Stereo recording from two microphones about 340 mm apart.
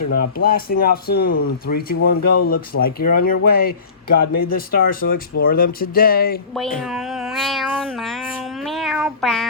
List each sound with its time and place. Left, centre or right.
0.3 s speech: left
2.0 s speech: left
2.5 s speech: left
6.8 s cat: centre